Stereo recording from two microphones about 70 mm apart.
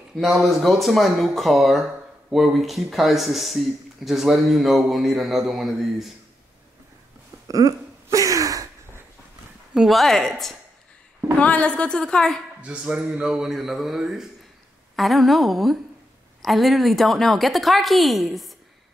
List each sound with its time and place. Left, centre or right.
0.2 s speech: centre
7.4 s a sound: right
9.8 s speech: centre
11.3 s a woman's voice: centre
12.6 s speech: centre